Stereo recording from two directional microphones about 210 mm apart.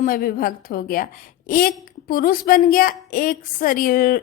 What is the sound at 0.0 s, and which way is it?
A woman's voice, 45° left (ahead or behind).